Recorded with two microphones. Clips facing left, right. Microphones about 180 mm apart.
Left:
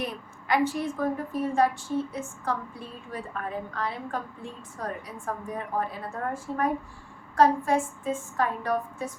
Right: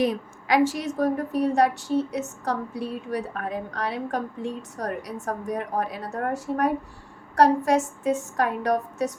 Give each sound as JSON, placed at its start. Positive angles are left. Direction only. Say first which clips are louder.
{"t": 0.0, "sound": "a woman's voice", "louder": "right 10 dB", "side_deg": -90}